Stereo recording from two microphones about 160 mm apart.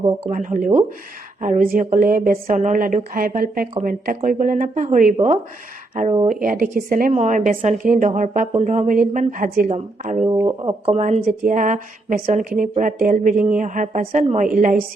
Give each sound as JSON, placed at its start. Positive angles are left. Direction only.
{"t": 0.3, "sound": "a woman's voice", "side_deg": -55}
{"t": 6.2, "sound": "a woman's voice", "side_deg": -60}
{"t": 10.2, "sound": "speech", "side_deg": -25}
{"t": 10.9, "sound": "a woman's voice", "side_deg": -45}